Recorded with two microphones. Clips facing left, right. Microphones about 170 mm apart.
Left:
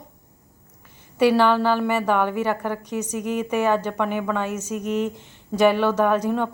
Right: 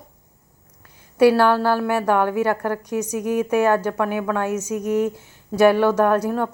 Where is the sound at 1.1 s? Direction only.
10° right (ahead or behind).